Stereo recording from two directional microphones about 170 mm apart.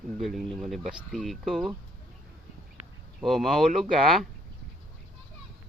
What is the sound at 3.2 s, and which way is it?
Speech, centre (ahead or behind).